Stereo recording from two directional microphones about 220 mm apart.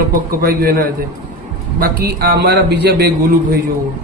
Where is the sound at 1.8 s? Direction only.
45° right (ahead or behind).